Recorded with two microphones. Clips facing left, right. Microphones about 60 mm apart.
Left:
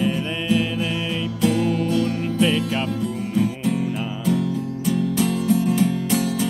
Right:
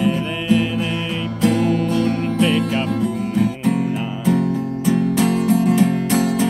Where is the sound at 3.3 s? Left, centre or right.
Right.